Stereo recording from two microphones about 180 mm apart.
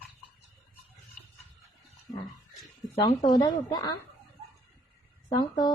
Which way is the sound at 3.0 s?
25° left (ahead or behind).